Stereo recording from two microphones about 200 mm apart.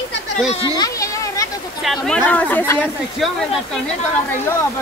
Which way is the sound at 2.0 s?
5° left (ahead or behind).